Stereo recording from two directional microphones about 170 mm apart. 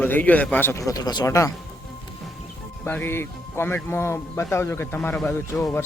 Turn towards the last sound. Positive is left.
turn(degrees=10)  # may be behind; listen again after turning